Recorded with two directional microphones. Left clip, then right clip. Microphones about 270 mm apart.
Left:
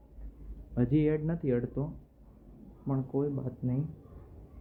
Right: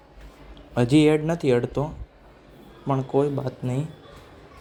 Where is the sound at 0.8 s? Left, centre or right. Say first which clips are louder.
Right 10 dB; centre.